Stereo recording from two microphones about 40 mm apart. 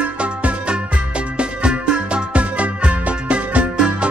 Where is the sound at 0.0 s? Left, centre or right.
Right.